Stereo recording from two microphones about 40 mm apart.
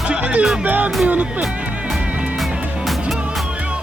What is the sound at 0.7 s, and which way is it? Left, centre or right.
Music, right.